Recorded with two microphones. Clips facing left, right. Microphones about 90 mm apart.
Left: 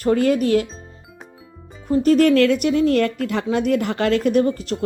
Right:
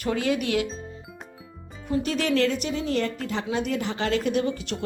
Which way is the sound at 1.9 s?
45° left (ahead or behind).